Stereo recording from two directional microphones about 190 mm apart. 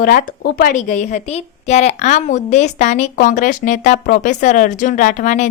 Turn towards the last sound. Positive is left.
turn(degrees=40)  # may be behind; listen again after turning